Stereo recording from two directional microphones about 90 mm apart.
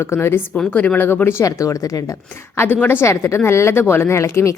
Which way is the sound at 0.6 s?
15° left (ahead or behind).